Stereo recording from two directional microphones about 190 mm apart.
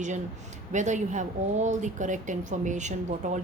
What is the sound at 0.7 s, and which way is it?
Speech, 40° right (ahead or behind).